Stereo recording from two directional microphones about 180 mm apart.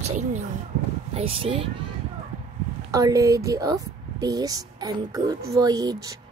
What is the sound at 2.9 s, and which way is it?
Speech, 20° right (ahead or behind).